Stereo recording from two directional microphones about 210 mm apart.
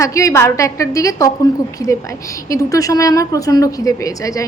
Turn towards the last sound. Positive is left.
turn(degrees=15)  # may be behind; listen again after turning